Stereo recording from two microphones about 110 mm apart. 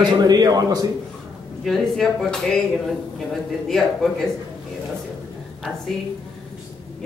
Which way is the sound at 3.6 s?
5° left (ahead or behind).